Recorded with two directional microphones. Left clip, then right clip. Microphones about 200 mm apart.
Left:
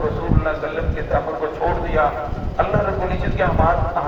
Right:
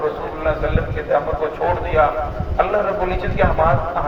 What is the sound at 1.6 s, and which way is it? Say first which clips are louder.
A man's voice: right 2 dB; 45° right (ahead or behind).